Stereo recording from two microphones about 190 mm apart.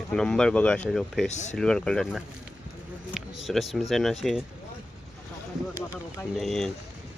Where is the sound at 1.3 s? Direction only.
40° left (ahead or behind).